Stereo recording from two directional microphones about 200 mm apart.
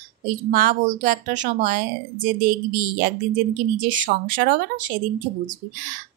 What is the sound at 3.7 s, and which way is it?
Speech, 40° right (ahead or behind).